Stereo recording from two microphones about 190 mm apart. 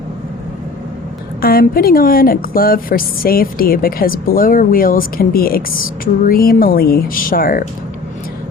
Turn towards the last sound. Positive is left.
turn(degrees=50)  # may be behind; listen again after turning